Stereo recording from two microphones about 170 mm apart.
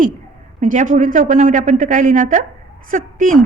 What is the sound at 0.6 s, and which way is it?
A woman's voice, 45° right (ahead or behind).